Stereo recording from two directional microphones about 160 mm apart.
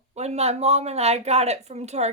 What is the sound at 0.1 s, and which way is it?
Speech, 45° right (ahead or behind).